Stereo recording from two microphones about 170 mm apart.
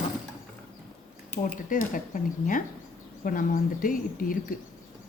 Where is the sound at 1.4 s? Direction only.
50° left (ahead or behind).